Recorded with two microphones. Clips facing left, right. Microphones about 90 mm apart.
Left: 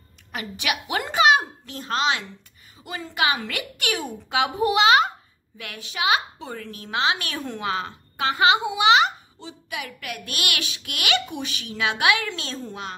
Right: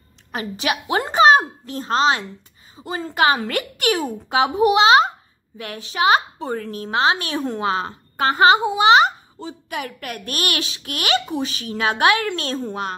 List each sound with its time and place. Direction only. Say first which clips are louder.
0.3 s a child's voice: right 4 dB; 35° right (ahead or behind)
4.6 s a child's voice: right 4 dB; 25° right (ahead or behind); by 12.3 s 40° right (ahead or behind)
12.3 s a child's voice: right 7 dB; 55° right (ahead or behind)